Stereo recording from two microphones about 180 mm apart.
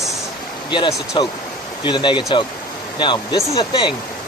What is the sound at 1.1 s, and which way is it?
Speech, 25° left (ahead or behind).